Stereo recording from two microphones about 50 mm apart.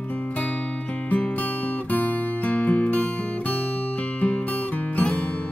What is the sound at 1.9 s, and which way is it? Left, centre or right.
Music, left.